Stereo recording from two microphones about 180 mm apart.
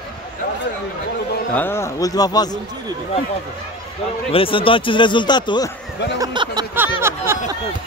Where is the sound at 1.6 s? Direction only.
15° left (ahead or behind).